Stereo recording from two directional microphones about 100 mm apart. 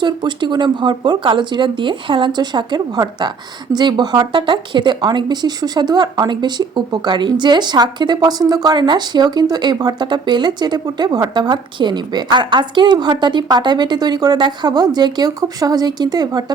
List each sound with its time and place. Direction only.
0.0 s speech: 50° right (ahead or behind)